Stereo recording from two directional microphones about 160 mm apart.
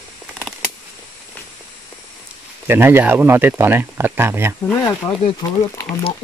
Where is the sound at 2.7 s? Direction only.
15° right (ahead or behind).